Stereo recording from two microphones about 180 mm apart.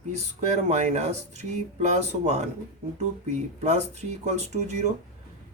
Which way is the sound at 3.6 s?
40° right (ahead or behind).